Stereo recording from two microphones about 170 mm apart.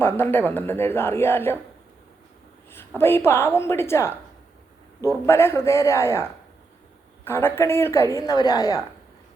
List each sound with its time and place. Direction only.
0.0 s a woman's voice: 15° left (ahead or behind)
2.6 s a woman's voice: 15° left (ahead or behind)